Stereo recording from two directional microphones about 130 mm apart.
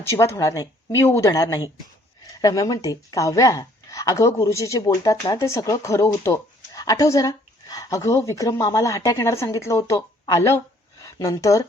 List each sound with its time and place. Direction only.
0.0 s speech: 20° left (ahead or behind)